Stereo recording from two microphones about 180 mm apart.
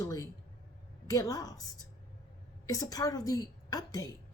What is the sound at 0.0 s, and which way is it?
A woman's voice, 20° left (ahead or behind).